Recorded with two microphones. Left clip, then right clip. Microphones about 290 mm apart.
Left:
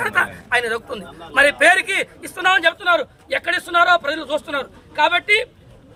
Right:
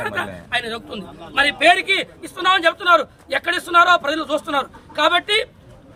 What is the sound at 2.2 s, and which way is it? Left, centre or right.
Speech, centre.